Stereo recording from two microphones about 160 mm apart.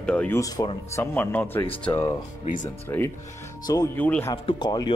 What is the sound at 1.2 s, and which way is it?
Speech, 10° left (ahead or behind).